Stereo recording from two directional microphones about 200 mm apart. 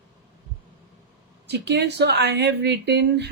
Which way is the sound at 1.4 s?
55° right (ahead or behind).